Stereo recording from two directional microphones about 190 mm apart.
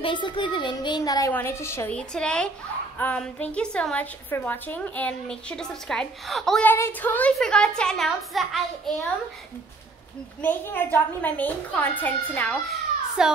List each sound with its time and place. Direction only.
0.0 s a woman's voice: 25° left (ahead or behind); by 8.9 s centre (ahead or behind)
10.4 s a woman's voice: 10° left (ahead or behind)